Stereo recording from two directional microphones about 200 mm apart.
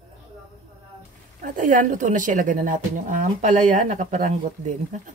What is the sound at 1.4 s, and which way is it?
Speech, 40° right (ahead or behind).